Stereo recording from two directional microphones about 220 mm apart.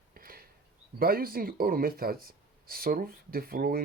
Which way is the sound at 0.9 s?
40° right (ahead or behind).